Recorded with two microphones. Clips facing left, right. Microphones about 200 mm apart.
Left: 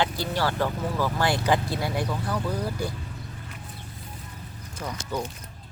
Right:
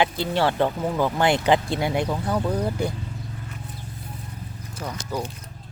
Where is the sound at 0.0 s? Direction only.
25° right (ahead or behind).